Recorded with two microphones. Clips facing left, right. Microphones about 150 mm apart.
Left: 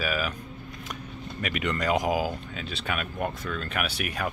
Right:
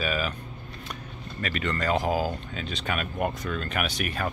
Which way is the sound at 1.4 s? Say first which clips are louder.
Even; 15° left (ahead or behind).